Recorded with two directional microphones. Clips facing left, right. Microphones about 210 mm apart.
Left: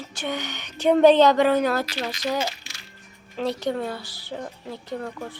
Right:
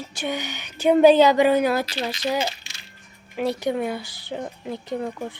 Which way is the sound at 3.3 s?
10° right (ahead or behind).